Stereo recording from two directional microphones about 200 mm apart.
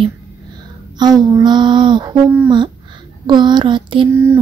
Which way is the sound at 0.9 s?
20° right (ahead or behind).